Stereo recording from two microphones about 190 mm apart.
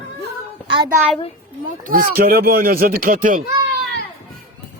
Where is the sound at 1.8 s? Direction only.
50° right (ahead or behind).